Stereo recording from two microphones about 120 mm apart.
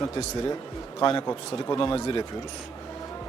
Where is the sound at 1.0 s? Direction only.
30° left (ahead or behind).